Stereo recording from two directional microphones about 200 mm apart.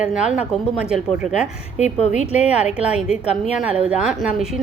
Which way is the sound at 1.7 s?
35° left (ahead or behind).